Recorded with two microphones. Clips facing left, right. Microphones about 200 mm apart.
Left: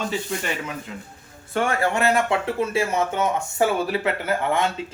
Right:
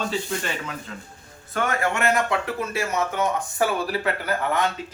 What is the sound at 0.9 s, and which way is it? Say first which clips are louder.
Speech: left 2 dB; 15° left (ahead or behind).